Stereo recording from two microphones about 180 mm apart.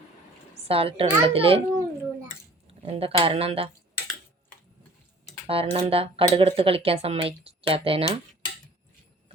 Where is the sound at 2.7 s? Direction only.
35° right (ahead or behind).